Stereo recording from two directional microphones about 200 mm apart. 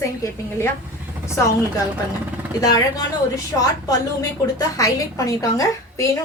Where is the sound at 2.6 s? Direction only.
20° left (ahead or behind).